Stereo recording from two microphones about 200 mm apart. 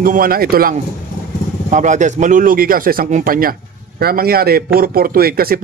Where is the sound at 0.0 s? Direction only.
45° right (ahead or behind).